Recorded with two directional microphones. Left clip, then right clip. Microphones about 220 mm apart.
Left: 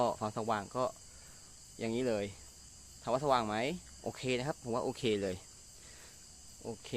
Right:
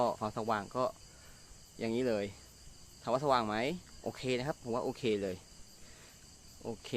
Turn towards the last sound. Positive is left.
turn(degrees=-10)  # may be behind; listen again after turning